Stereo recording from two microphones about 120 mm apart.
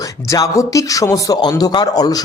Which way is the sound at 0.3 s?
30° left (ahead or behind).